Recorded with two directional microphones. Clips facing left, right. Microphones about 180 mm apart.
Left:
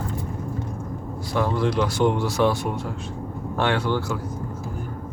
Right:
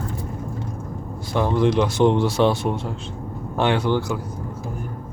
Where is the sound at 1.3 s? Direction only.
20° right (ahead or behind).